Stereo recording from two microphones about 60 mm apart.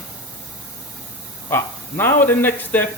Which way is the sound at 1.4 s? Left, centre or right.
Left.